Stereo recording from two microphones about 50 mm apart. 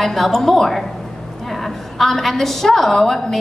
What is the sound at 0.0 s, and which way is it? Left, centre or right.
A woman's voice, centre.